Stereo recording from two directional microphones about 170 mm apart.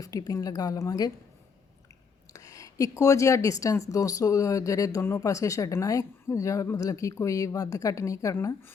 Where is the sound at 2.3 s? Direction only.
20° left (ahead or behind).